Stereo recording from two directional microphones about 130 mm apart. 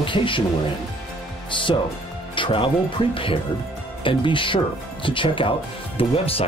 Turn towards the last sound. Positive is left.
turn(degrees=45)  # may be behind; listen again after turning